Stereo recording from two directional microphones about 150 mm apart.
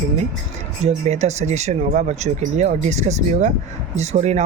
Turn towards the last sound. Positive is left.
turn(degrees=-50)  # may be behind; listen again after turning